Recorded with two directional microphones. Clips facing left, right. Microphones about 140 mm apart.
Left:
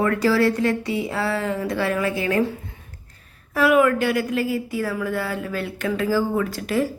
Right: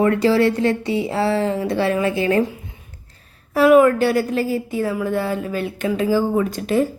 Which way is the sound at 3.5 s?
30° right (ahead or behind).